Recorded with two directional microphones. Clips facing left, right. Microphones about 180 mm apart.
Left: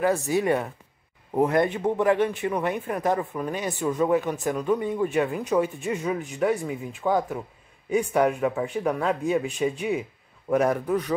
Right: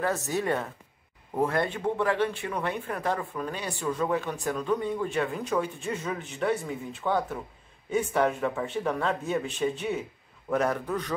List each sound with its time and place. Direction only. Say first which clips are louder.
0.0 s speech: left 5 dB; 10° left (ahead or behind)